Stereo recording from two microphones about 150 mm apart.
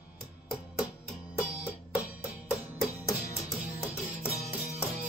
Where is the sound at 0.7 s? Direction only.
Centre (ahead or behind).